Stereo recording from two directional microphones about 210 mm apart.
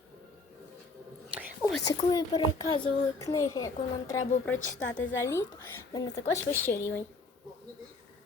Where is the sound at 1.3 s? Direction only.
5° right (ahead or behind).